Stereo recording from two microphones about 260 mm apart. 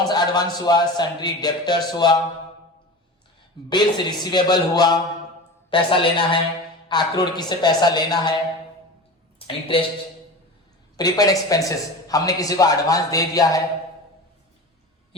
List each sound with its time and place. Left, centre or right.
0.0 s a man's voice: centre
3.7 s a man's voice: centre
9.5 s a woman's voice: centre
10.9 s a man's voice: centre